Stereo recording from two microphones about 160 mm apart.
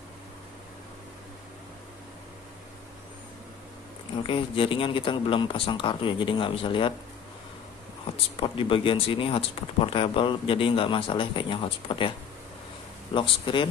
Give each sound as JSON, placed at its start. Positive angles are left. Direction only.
{"t": 4.2, "sound": "speech", "side_deg": 35}
{"t": 8.4, "sound": "speech", "side_deg": 35}
{"t": 13.1, "sound": "speech", "side_deg": 30}